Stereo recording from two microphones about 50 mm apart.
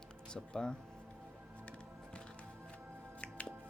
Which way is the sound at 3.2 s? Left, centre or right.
Left.